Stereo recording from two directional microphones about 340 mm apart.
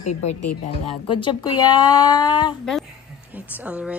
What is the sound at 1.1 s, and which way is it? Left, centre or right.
A woman's voice, centre.